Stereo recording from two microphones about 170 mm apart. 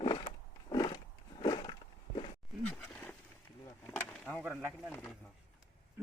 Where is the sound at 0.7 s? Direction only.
25° left (ahead or behind).